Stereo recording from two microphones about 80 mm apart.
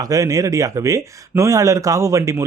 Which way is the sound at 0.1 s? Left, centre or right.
Right.